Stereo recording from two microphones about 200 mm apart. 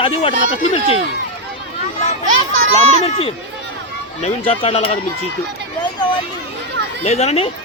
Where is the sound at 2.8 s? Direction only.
30° left (ahead or behind).